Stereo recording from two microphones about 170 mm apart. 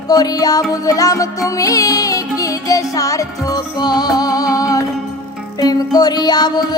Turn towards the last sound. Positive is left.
turn(degrees=25)  # may be behind; listen again after turning